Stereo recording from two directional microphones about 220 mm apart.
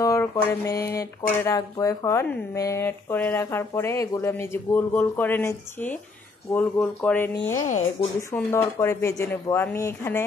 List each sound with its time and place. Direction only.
0.0 s mantra: 15° left (ahead or behind)
0.9 s speech: 15° left (ahead or behind)
7.6 s speech: 35° left (ahead or behind)
8.3 s speech: 10° left (ahead or behind)